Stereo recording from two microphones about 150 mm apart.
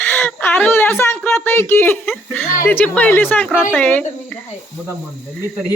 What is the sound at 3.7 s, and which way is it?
Speech, 10° left (ahead or behind).